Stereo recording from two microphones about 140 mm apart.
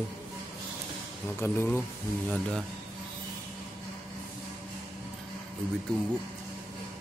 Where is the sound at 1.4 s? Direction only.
15° left (ahead or behind).